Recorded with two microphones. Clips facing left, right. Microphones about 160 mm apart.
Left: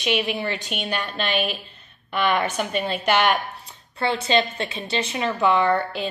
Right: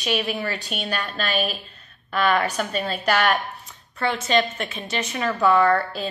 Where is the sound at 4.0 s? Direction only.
30° left (ahead or behind).